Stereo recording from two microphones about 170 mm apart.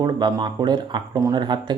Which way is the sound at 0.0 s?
25° right (ahead or behind).